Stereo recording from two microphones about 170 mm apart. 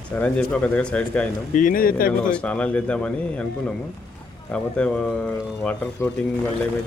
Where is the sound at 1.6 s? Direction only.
55° left (ahead or behind).